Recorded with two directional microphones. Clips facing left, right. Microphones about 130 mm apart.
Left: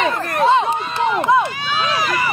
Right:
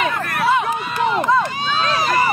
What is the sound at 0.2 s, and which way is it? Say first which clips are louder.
Run: left 3 dB; 30° left (ahead or behind).